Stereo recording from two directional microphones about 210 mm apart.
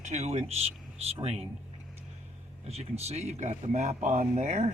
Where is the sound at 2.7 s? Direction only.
30° right (ahead or behind).